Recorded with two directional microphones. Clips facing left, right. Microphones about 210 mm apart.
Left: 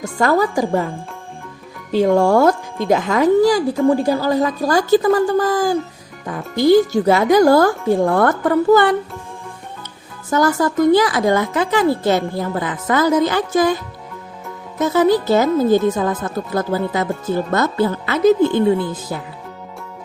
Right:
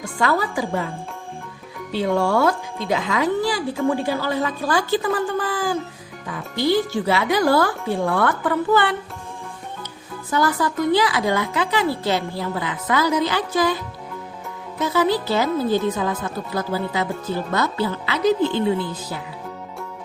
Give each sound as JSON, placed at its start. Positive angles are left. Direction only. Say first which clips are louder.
{"t": 0.0, "sound": "a woman's voice", "louder": "left 5 dB", "side_deg": 45}
{"t": 10.2, "sound": "a woman's voice", "louder": "left 5 dB", "side_deg": 45}
{"t": 14.8, "sound": "a woman's voice", "louder": "left 6 dB", "side_deg": 45}